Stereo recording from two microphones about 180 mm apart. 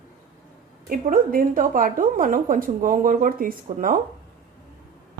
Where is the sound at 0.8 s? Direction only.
50° right (ahead or behind).